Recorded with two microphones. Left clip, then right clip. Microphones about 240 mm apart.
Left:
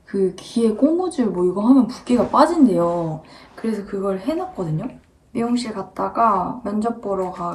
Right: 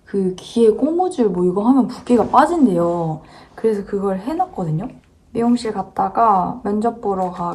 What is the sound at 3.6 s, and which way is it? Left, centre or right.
Speech, right.